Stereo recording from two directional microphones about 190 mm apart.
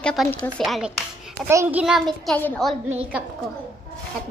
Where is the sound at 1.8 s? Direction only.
Centre (ahead or behind).